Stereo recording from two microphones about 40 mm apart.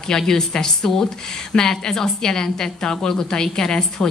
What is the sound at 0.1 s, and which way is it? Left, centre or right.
Speech, centre.